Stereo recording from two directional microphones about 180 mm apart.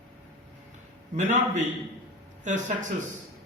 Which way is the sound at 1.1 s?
40° right (ahead or behind).